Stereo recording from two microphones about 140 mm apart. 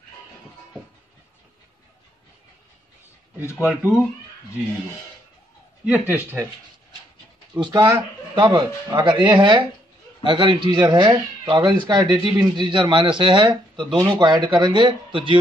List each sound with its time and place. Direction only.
3.6 s speech: 5° right (ahead or behind)
5.9 s speech: 10° right (ahead or behind)
7.5 s speech: 30° right (ahead or behind)